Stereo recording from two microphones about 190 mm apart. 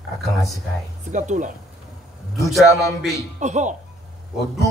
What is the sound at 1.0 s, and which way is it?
Speech, 40° right (ahead or behind).